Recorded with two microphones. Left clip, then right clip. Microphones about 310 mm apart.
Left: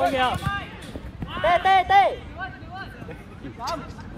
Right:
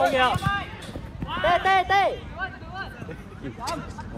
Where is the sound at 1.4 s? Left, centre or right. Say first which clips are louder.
Left 2 dB; left.